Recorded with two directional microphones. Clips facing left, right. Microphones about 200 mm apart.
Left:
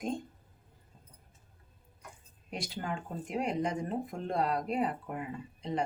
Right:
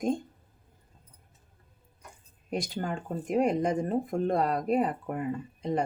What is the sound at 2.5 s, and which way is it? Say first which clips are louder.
Speech: right 5 dB; 45° right (ahead or behind).